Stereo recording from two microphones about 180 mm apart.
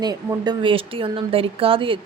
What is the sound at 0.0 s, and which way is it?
A woman's voice, 20° right (ahead or behind).